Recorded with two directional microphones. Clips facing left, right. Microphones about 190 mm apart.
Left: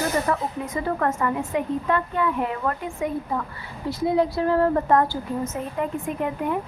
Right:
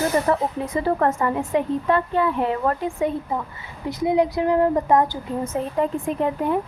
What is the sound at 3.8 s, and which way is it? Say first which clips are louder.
Speech: right 2 dB; 20° right (ahead or behind).